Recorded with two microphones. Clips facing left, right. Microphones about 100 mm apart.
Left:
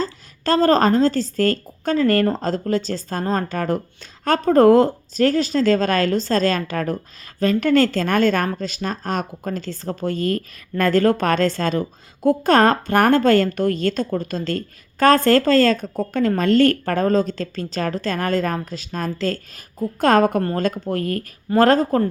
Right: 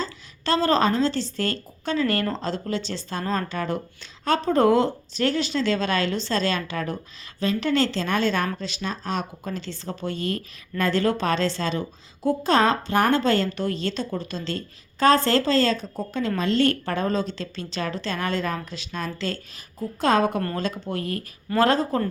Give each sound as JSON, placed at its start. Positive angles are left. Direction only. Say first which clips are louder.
{"t": 0.0, "sound": "speech", "louder": "left 5 dB", "side_deg": 45}